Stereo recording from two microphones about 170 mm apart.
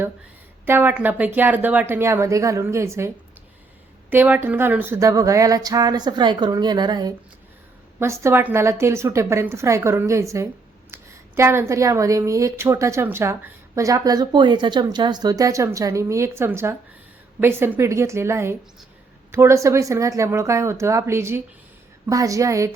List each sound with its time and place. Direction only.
0.6 s a woman's voice: 10° right (ahead or behind)
4.1 s a woman's voice: 10° right (ahead or behind)